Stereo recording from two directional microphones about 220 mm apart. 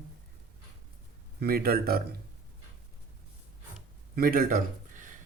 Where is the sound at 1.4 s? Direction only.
45° right (ahead or behind).